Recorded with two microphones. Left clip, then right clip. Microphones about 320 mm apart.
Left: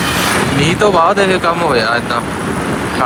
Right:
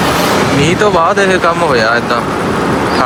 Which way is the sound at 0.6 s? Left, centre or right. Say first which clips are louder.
Left 1 dB; centre.